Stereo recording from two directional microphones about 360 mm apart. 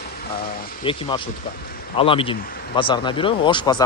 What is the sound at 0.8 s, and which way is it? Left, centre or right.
Speech, centre.